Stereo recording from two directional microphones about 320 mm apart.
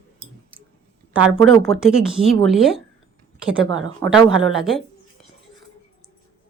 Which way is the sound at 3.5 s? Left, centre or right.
Right.